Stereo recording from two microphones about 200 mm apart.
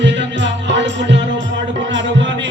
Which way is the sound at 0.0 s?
65° right (ahead or behind).